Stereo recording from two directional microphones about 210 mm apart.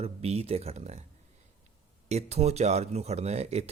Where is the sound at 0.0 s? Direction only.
30° right (ahead or behind).